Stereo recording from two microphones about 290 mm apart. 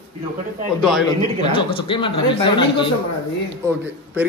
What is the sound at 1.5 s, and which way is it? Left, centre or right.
Speech, centre.